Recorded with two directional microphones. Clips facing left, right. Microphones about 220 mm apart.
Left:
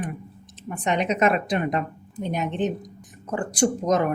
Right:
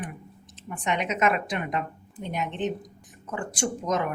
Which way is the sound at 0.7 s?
35° left (ahead or behind).